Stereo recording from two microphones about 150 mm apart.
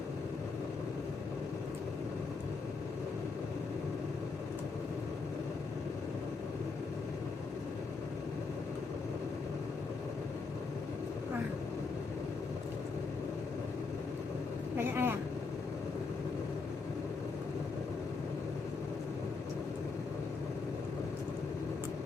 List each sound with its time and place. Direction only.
14.8 s vehicle: 15° right (ahead or behind)